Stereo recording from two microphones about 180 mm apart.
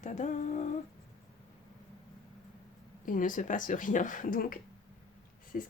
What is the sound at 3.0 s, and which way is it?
Speech, 45° left (ahead or behind).